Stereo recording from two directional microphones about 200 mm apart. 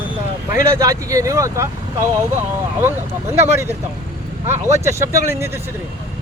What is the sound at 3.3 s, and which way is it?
A man's voice, 10° right (ahead or behind).